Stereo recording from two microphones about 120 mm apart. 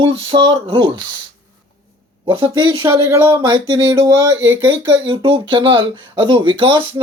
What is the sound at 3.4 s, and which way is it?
Speech, 40° right (ahead or behind).